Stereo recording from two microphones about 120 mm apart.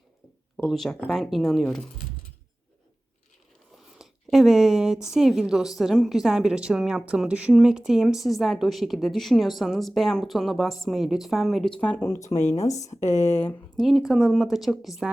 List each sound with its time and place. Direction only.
0.5 s a woman's voice: centre (ahead or behind)
3.9 s a sound: 5° right (ahead or behind)
5.1 s a woman's voice: 5° right (ahead or behind); by 12.2 s 15° left (ahead or behind)
12.2 s speech: 75° left (ahead or behind)
13.3 s speech: 20° left (ahead or behind)
13.7 s a woman's voice: centre (ahead or behind)